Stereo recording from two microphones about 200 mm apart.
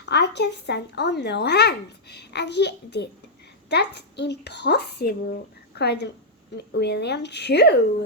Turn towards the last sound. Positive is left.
turn(degrees=55)  # may be behind; listen again after turning